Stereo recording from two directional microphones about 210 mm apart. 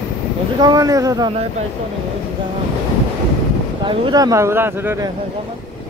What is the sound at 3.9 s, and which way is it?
Speech, 20° right (ahead or behind).